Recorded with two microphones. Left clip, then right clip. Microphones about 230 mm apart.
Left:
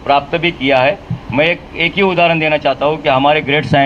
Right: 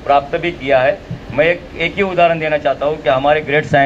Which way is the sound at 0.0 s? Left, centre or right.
Left.